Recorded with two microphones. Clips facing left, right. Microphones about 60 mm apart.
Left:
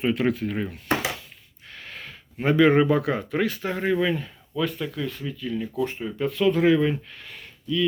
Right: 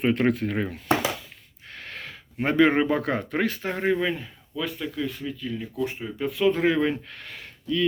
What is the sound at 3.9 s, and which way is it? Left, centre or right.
Speech, centre.